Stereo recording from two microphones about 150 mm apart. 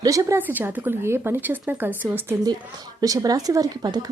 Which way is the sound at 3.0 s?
25° right (ahead or behind).